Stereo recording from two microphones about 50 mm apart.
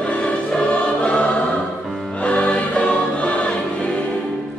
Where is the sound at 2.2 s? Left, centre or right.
Left.